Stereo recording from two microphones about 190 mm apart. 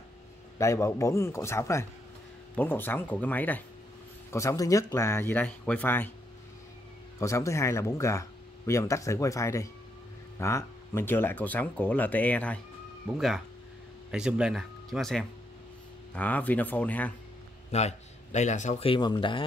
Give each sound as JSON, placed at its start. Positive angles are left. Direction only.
{"t": 0.6, "sound": "speech", "side_deg": 15}
{"t": 7.2, "sound": "speech", "side_deg": 15}
{"t": 14.1, "sound": "speech", "side_deg": -5}
{"t": 17.6, "sound": "speech", "side_deg": 35}